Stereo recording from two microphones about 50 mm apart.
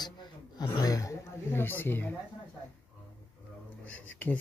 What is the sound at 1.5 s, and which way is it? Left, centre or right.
Speech, left.